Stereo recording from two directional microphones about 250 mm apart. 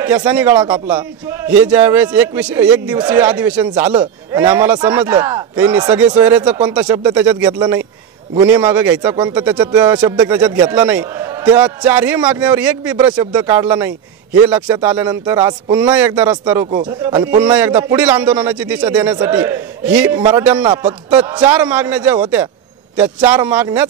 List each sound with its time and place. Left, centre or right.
0.3 s a man's voice: centre
20.2 s a man's voice: centre
20.8 s a man's voice: centre